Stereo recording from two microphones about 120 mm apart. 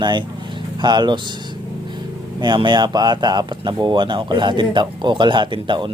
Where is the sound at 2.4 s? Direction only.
40° right (ahead or behind).